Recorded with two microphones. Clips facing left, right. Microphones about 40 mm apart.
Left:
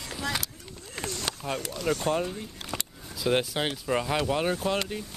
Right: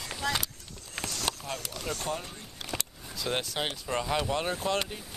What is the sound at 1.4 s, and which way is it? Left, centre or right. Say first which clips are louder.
Speech: left 5 dB; centre.